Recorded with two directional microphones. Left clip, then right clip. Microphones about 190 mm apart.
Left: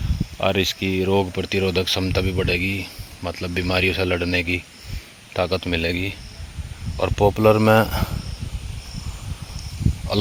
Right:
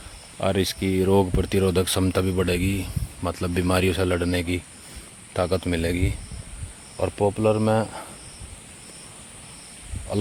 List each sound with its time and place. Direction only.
0.3 s a man's voice: 10° right (ahead or behind)
6.9 s speech: 5° right (ahead or behind)
7.3 s speech: 10° left (ahead or behind)